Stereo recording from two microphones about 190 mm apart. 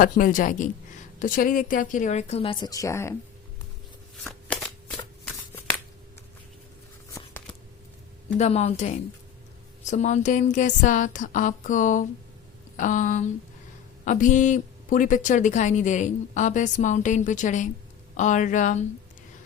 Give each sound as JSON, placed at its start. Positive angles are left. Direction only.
{"t": 0.0, "sound": "a woman's voice", "side_deg": 45}
{"t": 4.2, "sound": "shuffling cards", "side_deg": 10}
{"t": 7.1, "sound": "a sound", "side_deg": 10}
{"t": 8.4, "sound": "a woman's voice", "side_deg": 35}